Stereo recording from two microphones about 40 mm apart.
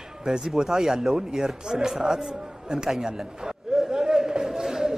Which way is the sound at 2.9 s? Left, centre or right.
Centre.